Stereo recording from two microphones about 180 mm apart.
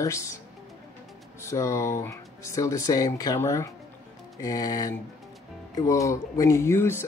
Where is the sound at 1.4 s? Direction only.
15° left (ahead or behind).